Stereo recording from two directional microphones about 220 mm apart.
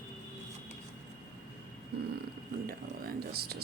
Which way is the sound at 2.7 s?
45° right (ahead or behind).